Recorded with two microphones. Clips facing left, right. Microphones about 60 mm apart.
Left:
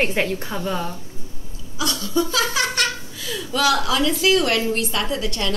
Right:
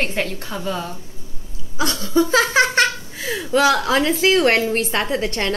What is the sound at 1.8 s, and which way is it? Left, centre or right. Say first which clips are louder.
Speech: right 4 dB; right.